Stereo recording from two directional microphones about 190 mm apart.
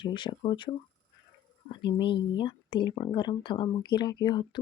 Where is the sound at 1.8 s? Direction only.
25° left (ahead or behind).